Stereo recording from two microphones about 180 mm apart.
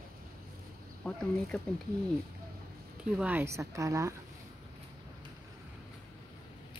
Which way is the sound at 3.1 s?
10° right (ahead or behind).